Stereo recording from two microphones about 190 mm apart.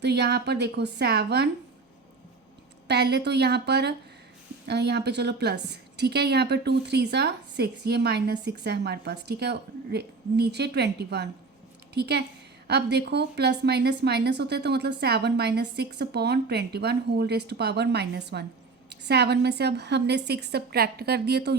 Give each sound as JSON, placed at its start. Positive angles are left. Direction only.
{"t": 0.0, "sound": "a woman's voice", "side_deg": -60}
{"t": 2.8, "sound": "a woman's voice", "side_deg": -60}